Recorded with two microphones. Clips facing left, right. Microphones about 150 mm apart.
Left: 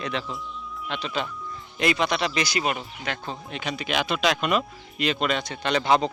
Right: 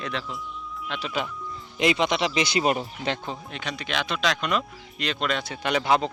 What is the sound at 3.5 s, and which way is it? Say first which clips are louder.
Speech: left 5 dB; 5° left (ahead or behind).